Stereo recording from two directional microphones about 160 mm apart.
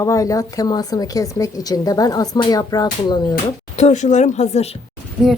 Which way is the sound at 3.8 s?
45° left (ahead or behind).